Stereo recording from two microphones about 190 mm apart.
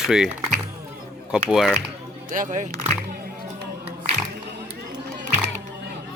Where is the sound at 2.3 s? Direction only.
40° right (ahead or behind).